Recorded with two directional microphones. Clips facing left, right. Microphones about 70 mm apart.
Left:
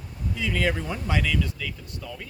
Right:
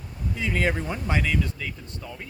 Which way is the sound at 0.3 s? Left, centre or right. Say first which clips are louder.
Right 1 dB; right.